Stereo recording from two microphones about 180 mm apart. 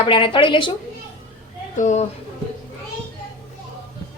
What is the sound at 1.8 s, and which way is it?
Speech, 40° left (ahead or behind).